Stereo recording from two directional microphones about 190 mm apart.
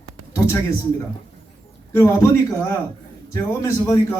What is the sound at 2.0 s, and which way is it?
A man's voice, 15° left (ahead or behind).